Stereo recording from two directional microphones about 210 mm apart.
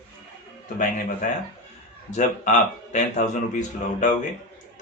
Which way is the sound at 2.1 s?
35° left (ahead or behind).